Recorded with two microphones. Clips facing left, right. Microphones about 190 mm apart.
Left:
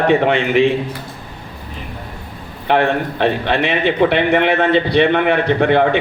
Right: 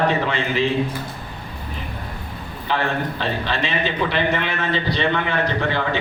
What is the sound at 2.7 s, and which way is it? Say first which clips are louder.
A man's voice: left 7 dB; 65° left (ahead or behind).